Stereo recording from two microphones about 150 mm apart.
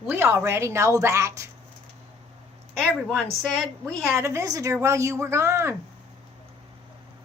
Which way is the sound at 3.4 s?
5° left (ahead or behind).